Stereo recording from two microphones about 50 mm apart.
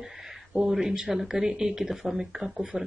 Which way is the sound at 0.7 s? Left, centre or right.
Centre.